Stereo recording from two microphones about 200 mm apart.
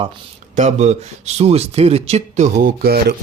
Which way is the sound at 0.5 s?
35° right (ahead or behind).